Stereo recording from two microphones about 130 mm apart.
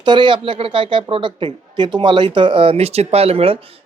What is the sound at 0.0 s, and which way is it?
Speech, 35° right (ahead or behind).